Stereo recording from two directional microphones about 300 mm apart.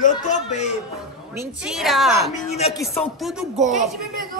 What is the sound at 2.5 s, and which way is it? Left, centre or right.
Chopping, centre.